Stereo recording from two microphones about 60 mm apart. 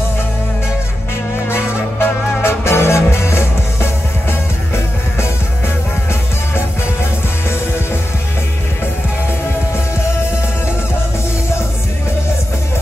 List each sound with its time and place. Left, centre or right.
1.5 s music: left